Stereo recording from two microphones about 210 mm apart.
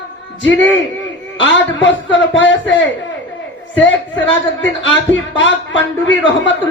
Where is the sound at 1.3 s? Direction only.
60° left (ahead or behind).